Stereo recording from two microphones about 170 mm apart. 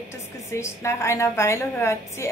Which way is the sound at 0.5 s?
15° left (ahead or behind).